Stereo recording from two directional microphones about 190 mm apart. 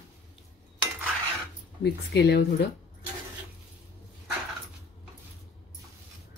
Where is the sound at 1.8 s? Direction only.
60° left (ahead or behind).